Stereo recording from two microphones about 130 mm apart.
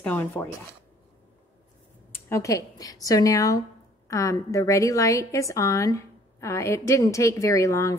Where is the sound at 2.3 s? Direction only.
25° left (ahead or behind).